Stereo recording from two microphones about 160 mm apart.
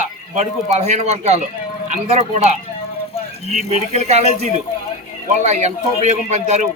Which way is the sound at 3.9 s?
45° right (ahead or behind).